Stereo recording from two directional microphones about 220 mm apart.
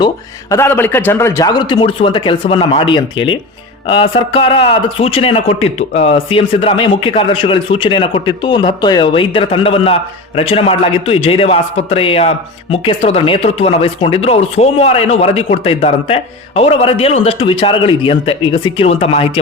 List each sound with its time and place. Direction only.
0.5 s a man's voice: 10° left (ahead or behind); by 19.3 s 25° left (ahead or behind)